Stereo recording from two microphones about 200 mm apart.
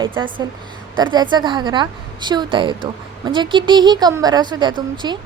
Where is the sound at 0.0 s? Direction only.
25° right (ahead or behind).